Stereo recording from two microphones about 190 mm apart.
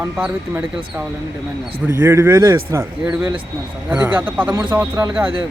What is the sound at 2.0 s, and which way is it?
Speech, 15° right (ahead or behind).